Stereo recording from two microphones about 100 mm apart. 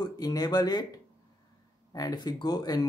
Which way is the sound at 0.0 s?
40° left (ahead or behind).